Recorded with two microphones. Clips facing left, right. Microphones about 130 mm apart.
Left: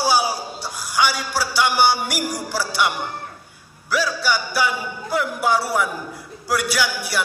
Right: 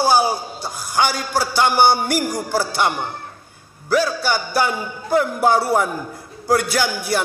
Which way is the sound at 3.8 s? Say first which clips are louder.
Right 3 dB; 50° right (ahead or behind).